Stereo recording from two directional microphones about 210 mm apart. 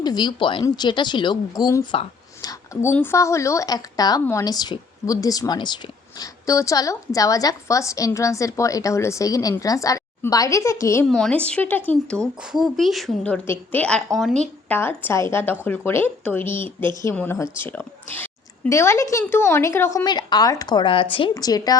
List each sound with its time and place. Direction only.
0.0 s speech: 20° left (ahead or behind)
11.0 s a woman's voice: 5° left (ahead or behind)